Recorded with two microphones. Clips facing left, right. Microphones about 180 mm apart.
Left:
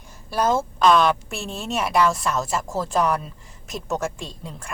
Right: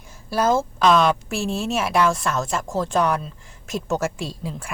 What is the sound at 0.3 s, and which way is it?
Speech, 5° right (ahead or behind).